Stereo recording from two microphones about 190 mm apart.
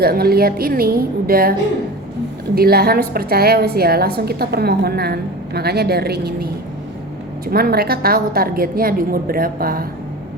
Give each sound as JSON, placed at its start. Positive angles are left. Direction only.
{"t": 0.0, "sound": "a woman's voice", "side_deg": -55}
{"t": 2.6, "sound": "a woman's voice", "side_deg": -55}